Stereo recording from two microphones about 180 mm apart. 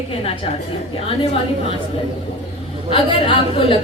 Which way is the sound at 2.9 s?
30° left (ahead or behind).